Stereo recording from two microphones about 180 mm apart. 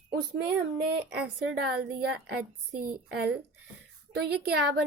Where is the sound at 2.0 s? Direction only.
60° right (ahead or behind).